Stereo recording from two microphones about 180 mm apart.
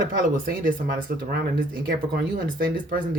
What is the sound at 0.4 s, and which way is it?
Speech, 50° right (ahead or behind).